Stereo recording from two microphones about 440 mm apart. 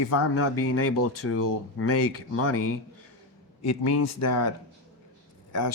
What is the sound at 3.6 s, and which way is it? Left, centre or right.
Speech, left.